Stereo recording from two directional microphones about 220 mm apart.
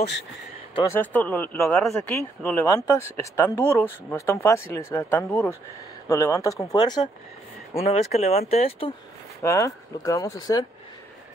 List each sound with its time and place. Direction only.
0.9 s speech: 10° left (ahead or behind); by 8.9 s 25° left (ahead or behind)
9.4 s speech: 15° left (ahead or behind)